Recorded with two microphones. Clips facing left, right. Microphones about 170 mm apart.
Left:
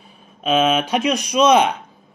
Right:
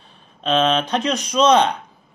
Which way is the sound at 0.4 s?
10° left (ahead or behind).